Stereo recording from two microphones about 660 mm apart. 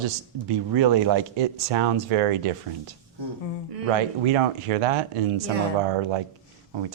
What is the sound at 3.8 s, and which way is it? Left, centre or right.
Speech, right.